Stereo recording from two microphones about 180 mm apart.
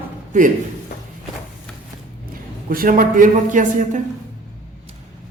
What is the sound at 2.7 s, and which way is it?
A man's voice, 50° right (ahead or behind).